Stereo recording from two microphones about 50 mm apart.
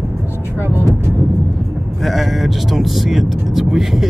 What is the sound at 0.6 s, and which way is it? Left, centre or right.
Speech, left.